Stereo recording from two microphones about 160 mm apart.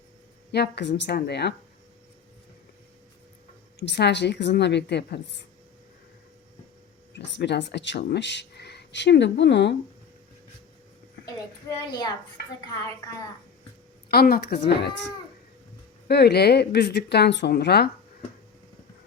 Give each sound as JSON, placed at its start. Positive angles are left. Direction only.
{"t": 0.5, "sound": "a woman's voice", "side_deg": 90}
{"t": 3.8, "sound": "a woman's voice", "side_deg": 90}
{"t": 7.3, "sound": "a woman's voice", "side_deg": 90}
{"t": 14.1, "sound": "a woman's voice", "side_deg": 75}